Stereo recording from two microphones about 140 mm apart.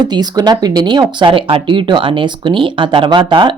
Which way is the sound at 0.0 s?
30° right (ahead or behind).